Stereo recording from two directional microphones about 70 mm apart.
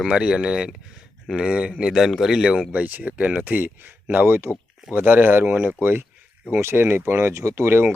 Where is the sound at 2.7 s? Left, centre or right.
Right.